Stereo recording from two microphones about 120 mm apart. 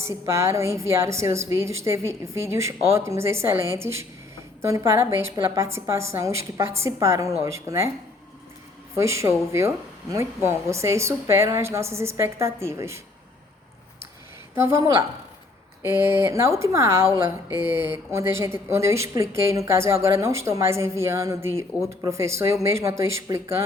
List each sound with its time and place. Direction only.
0.0 s speech: 25° right (ahead or behind)
9.0 s speech: 25° right (ahead or behind)
14.5 s speech: 20° right (ahead or behind)